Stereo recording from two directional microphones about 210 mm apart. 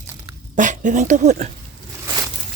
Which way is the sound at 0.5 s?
35° right (ahead or behind).